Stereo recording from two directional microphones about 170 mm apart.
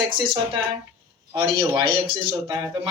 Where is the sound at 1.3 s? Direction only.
25° right (ahead or behind).